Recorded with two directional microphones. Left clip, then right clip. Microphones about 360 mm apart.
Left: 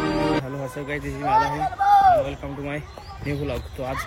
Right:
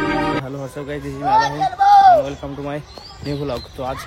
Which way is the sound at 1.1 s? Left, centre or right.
Right.